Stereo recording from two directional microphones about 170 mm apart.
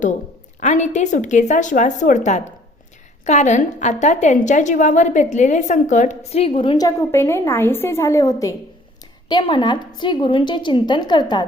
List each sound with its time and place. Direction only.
0.6 s a woman's voice: 45° left (ahead or behind)
6.7 s a woman's voice: 20° left (ahead or behind)